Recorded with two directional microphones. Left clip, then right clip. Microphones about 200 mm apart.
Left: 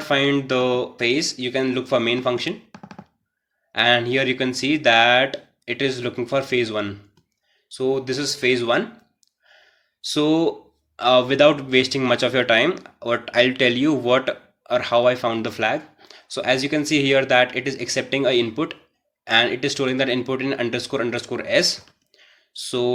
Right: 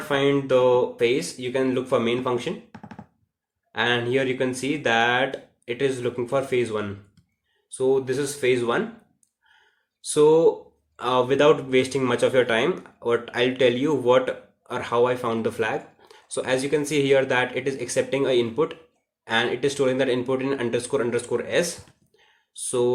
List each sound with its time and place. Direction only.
0.1 s speech: 35° left (ahead or behind)
3.7 s speech: 35° left (ahead or behind)
10.1 s speech: 25° left (ahead or behind)